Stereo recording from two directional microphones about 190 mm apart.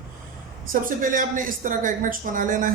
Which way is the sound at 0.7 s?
45° right (ahead or behind).